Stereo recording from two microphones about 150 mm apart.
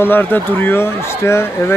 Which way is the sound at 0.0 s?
15° left (ahead or behind).